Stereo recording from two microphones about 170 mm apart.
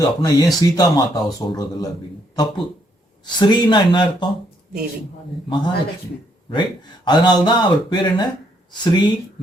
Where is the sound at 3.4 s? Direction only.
25° left (ahead or behind).